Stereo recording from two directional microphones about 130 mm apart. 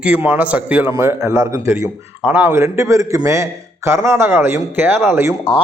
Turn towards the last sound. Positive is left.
turn(degrees=-20)  # may be behind; listen again after turning